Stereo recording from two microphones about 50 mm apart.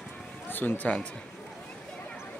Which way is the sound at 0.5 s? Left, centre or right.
Left.